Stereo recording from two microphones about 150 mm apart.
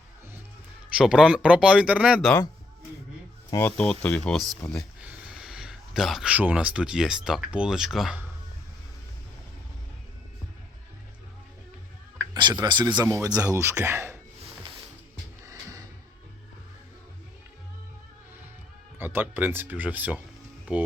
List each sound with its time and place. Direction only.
0.9 s speech: 5° right (ahead or behind)
3.5 s speech: 15° left (ahead or behind)
5.0 s a sound: 5° right (ahead or behind)
7.3 s speech: 5° right (ahead or behind)
12.3 s speech: 30° right (ahead or behind)
18.9 s speech: 15° right (ahead or behind)